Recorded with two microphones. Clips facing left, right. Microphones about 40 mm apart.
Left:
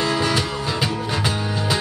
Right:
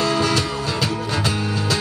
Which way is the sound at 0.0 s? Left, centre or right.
Centre.